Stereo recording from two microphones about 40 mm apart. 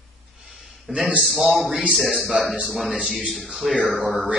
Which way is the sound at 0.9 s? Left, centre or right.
Centre.